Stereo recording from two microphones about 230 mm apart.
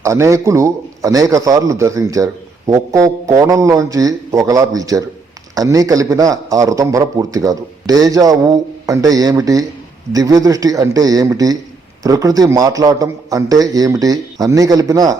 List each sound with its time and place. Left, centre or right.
0.0 s a man's voice: centre